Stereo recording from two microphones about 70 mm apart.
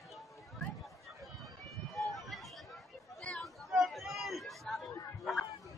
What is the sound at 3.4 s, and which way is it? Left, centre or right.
Chatter, centre.